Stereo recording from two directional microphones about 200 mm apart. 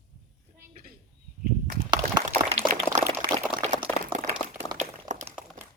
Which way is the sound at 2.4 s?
30° right (ahead or behind).